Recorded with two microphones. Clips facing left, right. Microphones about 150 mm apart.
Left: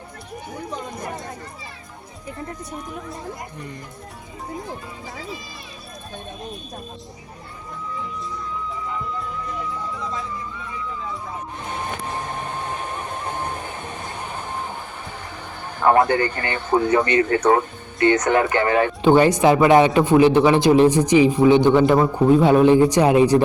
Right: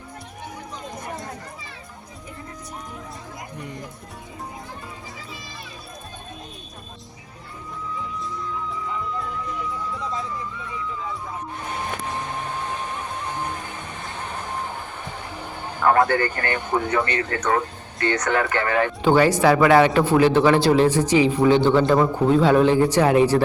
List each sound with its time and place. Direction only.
16.0 s speech: 20° left (ahead or behind)